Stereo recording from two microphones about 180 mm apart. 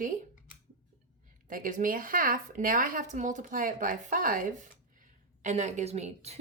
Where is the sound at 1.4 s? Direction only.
50° right (ahead or behind).